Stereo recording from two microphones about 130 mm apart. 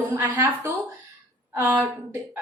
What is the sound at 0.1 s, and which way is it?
A woman's voice, 15° right (ahead or behind).